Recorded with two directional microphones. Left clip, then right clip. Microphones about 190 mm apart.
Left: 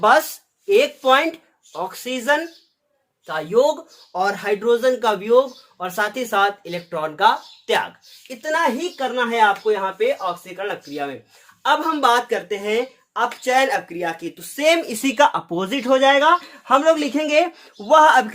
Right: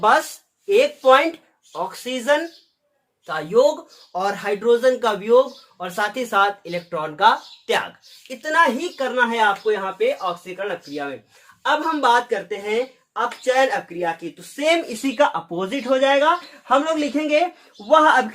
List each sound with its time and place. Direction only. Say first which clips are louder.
0.0 s speech: left 2 dB; 30° left (ahead or behind)
0.7 s speech: right 1 dB; 15° left (ahead or behind)
9.7 s speech: left 1 dB; 40° left (ahead or behind); by 18.3 s 60° left (ahead or behind)